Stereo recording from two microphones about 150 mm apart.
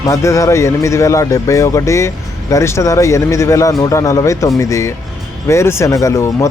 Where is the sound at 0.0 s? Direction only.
20° left (ahead or behind).